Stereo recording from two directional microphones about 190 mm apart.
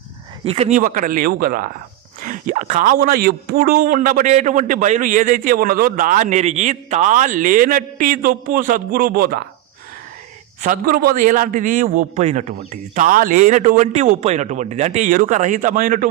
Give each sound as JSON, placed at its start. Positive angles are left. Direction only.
{"t": 0.4, "sound": "a man's voice", "side_deg": -35}
{"t": 0.8, "sound": "a man's voice", "side_deg": -45}
{"t": 10.6, "sound": "a man's voice", "side_deg": -50}